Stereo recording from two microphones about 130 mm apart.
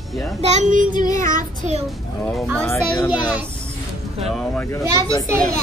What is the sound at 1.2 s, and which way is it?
Child singing, 90° right.